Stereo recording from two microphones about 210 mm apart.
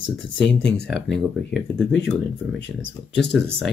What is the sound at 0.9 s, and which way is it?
Speech, 55° left (ahead or behind).